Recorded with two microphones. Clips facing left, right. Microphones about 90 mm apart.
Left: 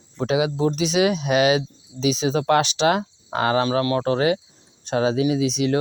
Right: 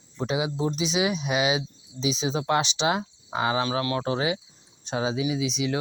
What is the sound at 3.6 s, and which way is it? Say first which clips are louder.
Speech: left 6 dB; 40° left (ahead or behind).